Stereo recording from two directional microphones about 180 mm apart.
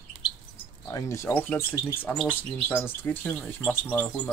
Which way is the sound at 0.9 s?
15° left (ahead or behind).